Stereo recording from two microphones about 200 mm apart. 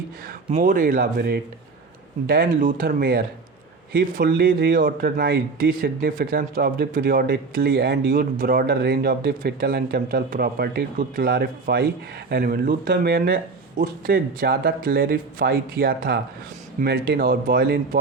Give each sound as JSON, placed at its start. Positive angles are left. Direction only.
{"t": 0.5, "sound": "speech", "side_deg": -40}